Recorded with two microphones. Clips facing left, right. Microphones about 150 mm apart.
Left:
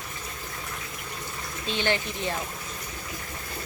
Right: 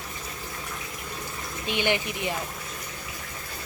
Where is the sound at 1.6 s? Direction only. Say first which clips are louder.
Right 1 dB; 15° right (ahead or behind).